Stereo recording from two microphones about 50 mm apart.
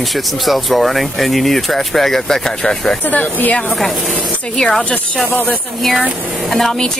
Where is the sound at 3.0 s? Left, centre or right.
Left.